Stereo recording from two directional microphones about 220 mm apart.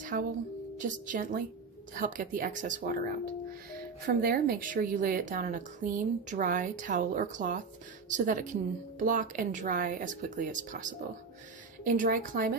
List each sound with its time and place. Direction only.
0.1 s a woman's voice: 40° right (ahead or behind)
4.1 s a woman's voice: 40° right (ahead or behind)